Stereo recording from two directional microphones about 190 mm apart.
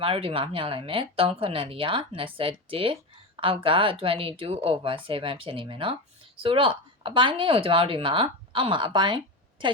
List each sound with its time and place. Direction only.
0.0 s a woman's voice: 30° right (ahead or behind)